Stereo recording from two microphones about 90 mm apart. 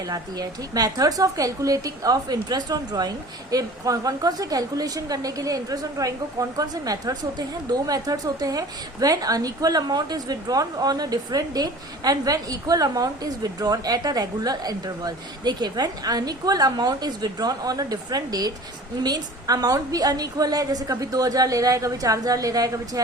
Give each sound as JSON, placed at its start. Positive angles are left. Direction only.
{"t": 0.1, "sound": "a woman's voice", "side_deg": -45}
{"t": 3.5, "sound": "a woman's voice", "side_deg": -40}